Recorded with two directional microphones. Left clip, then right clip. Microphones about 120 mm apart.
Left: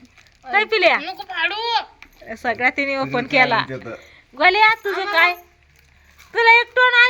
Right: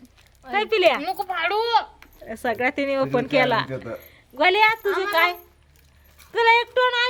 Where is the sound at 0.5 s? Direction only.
5° right (ahead or behind).